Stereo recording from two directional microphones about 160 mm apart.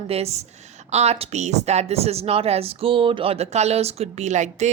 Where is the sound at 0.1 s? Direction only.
40° right (ahead or behind).